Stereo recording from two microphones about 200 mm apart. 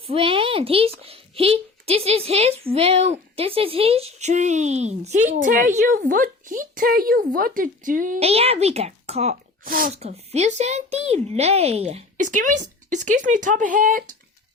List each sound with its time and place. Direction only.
0.1 s a woman's voice: 25° right (ahead or behind); by 8.2 s 45° right (ahead or behind)
8.2 s speech: 30° right (ahead or behind)
9.6 s speech: 45° right (ahead or behind)
9.9 s speech: 30° right (ahead or behind)